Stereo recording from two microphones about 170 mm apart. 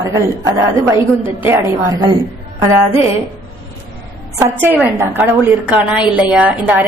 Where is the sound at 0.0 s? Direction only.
15° right (ahead or behind).